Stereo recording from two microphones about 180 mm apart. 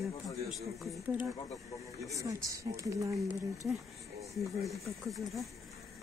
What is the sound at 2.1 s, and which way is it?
Speech, 20° right (ahead or behind).